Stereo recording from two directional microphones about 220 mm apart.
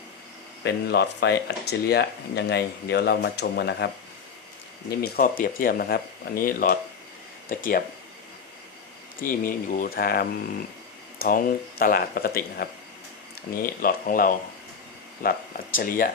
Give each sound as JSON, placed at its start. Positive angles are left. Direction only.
{"t": 0.6, "sound": "speech", "side_deg": 50}
{"t": 4.9, "sound": "speech", "side_deg": 40}
{"t": 9.1, "sound": "speech", "side_deg": 40}